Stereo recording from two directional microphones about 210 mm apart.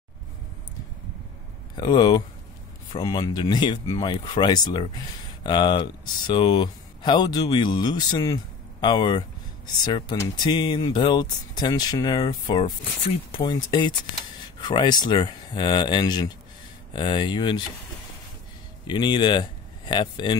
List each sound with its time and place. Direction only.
1.8 s speech: 20° left (ahead or behind)
18.9 s speech: 20° left (ahead or behind)